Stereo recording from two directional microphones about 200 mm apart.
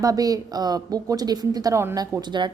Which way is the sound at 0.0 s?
15° right (ahead or behind).